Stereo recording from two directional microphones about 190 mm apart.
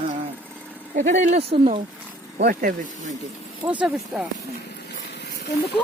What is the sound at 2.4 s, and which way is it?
Speech, 50° right (ahead or behind).